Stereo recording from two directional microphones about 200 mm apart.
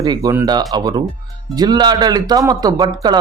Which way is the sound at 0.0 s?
20° right (ahead or behind).